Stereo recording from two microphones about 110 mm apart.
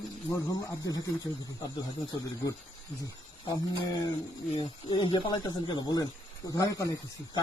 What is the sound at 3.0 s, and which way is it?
Speech, 35° left (ahead or behind).